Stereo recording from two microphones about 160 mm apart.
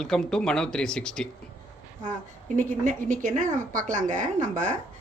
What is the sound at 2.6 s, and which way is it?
A woman's voice, 55° right (ahead or behind).